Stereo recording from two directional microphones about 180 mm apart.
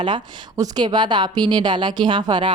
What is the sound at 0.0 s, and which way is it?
A woman's voice, 25° right (ahead or behind).